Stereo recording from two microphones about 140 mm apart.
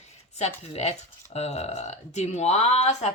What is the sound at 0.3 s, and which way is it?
Speech, 50° left (ahead or behind).